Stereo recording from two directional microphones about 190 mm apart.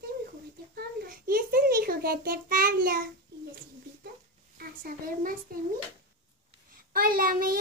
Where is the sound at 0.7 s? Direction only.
50° right (ahead or behind).